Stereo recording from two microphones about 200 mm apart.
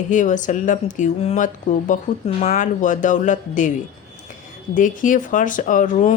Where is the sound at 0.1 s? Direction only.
40° left (ahead or behind).